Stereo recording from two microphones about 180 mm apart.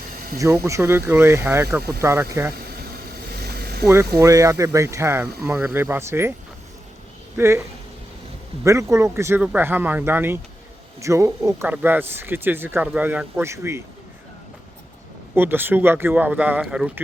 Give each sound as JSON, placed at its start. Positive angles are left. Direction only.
{"t": 0.3, "sound": "speech", "side_deg": -15}
{"t": 3.2, "sound": "vehicle", "side_deg": -60}
{"t": 3.8, "sound": "speech", "side_deg": -15}
{"t": 7.3, "sound": "speech", "side_deg": -15}
{"t": 8.6, "sound": "speech", "side_deg": -15}
{"t": 15.4, "sound": "speech", "side_deg": -10}